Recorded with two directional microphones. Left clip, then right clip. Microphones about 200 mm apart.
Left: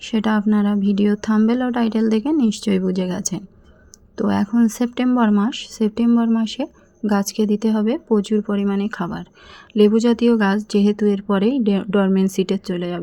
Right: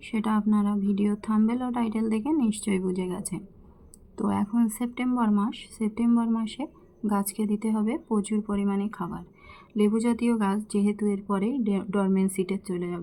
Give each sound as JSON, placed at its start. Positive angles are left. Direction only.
{"t": 0.0, "sound": "speech", "side_deg": 30}